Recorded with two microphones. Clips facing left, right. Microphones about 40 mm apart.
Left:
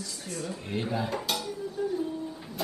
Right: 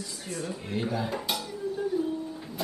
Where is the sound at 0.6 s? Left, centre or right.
Centre.